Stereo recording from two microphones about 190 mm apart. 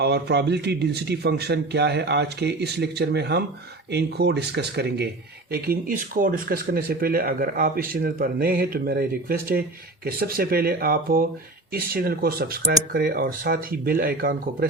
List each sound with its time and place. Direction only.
0.0 s a man's voice: 60° right (ahead or behind)
5.5 s speech: 50° right (ahead or behind)